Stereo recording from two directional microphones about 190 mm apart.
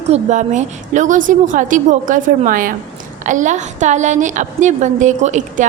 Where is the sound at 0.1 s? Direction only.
40° right (ahead or behind).